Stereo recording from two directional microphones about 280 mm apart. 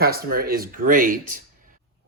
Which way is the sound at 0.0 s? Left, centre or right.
Right.